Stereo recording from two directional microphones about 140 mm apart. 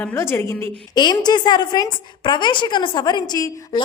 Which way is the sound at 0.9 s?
30° left (ahead or behind).